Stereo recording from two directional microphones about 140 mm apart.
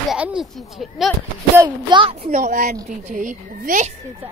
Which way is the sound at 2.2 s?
70° right (ahead or behind).